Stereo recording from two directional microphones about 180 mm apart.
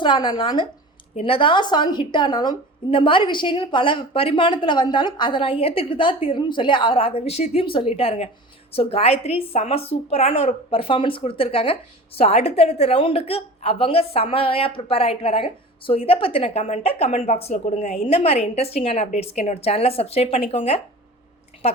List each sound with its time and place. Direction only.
0.0 s a woman's voice: 25° left (ahead or behind)